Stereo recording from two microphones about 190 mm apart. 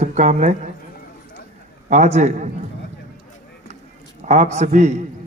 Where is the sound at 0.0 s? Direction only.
40° right (ahead or behind).